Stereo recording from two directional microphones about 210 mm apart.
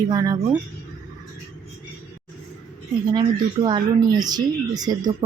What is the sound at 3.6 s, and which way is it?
Speech, 20° right (ahead or behind).